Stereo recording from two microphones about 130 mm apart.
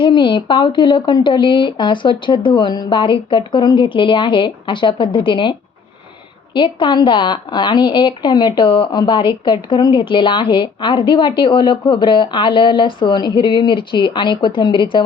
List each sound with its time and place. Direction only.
0.0 s a woman's voice: 40° left (ahead or behind)